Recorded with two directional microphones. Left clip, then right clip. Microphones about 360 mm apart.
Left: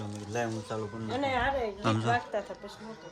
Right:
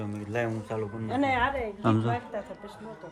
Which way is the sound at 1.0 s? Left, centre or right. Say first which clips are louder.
Right 3 dB; right.